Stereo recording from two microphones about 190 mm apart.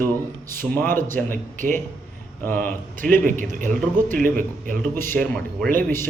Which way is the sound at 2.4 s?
10° left (ahead or behind).